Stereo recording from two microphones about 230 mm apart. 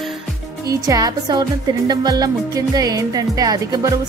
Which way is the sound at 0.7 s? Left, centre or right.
Centre.